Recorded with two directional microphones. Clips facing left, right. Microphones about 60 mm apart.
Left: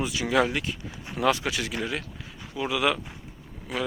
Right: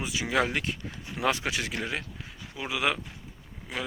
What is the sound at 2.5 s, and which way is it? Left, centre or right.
Speech, right.